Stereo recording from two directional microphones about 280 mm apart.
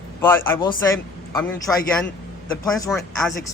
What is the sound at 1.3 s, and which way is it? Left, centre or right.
Speech, centre.